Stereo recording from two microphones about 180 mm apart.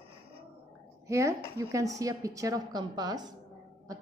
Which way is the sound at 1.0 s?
15° right (ahead or behind).